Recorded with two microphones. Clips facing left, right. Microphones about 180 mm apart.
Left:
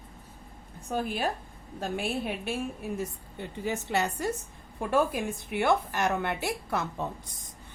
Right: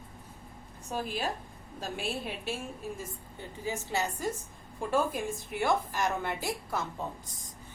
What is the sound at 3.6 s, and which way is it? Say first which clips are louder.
A woman's voice: left 3 dB; 65° left (ahead or behind).